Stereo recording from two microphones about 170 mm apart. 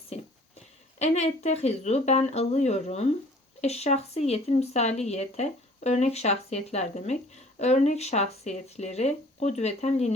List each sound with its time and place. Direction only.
0.9 s speech: 40° left (ahead or behind)